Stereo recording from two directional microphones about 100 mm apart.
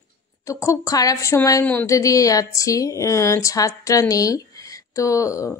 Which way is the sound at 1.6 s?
15° left (ahead or behind).